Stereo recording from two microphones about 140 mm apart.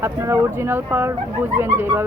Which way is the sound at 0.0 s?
20° right (ahead or behind).